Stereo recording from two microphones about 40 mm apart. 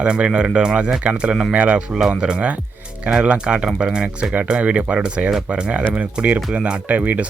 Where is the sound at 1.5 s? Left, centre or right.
Right.